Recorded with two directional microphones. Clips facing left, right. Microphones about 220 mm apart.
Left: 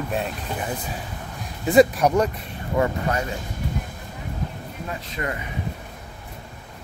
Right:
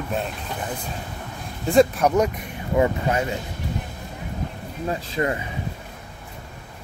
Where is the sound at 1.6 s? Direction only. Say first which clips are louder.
Left 1 dB; 5° left (ahead or behind).